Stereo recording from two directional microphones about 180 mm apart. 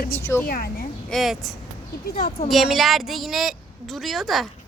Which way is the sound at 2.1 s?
30° left (ahead or behind).